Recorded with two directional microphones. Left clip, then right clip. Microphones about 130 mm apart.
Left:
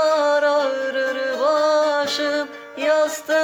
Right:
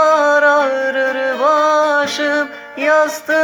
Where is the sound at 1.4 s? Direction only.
50° left (ahead or behind).